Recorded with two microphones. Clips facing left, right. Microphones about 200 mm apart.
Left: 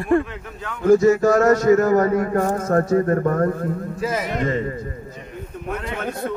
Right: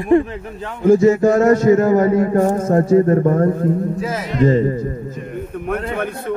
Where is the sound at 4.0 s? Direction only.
Centre (ahead or behind).